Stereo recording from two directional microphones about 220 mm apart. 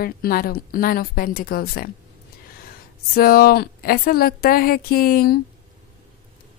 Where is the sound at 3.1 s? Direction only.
40° left (ahead or behind).